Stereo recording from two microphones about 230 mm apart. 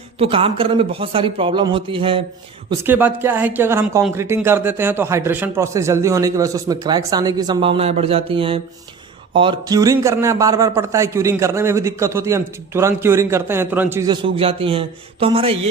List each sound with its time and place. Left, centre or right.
0.2 s a man's voice: right
2.6 s a man's voice: centre
14.1 s a man's voice: right